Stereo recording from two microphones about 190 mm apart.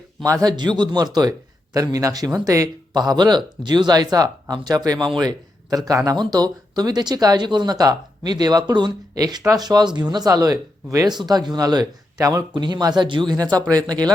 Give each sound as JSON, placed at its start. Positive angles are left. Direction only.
{"t": 0.4, "sound": "speech", "side_deg": -25}